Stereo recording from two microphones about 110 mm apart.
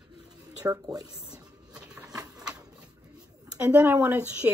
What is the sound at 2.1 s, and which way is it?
Printer, 35° right (ahead or behind).